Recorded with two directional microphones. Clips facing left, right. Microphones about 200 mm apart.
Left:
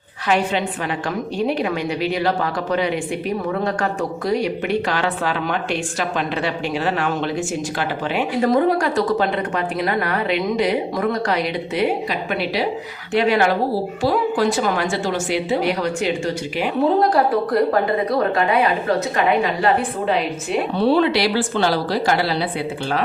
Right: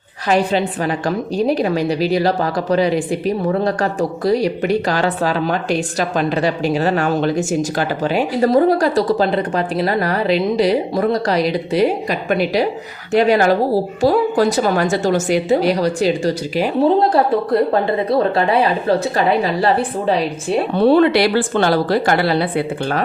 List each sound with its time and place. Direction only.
0.3 s a woman's voice: 40° right (ahead or behind)
20.7 s a woman's voice: 55° right (ahead or behind)